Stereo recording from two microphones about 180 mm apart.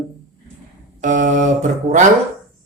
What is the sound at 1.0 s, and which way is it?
Mantra, 45° right (ahead or behind).